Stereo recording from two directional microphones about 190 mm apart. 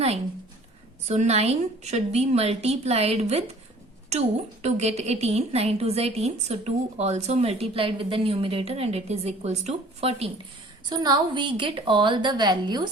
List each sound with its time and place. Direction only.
1.0 s a woman's voice: 35° right (ahead or behind)
4.6 s a woman's voice: 35° right (ahead or behind)
10.8 s a woman's voice: 20° right (ahead or behind)